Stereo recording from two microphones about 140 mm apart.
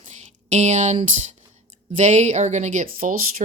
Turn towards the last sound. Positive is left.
turn(degrees=-75)  # may be behind; listen again after turning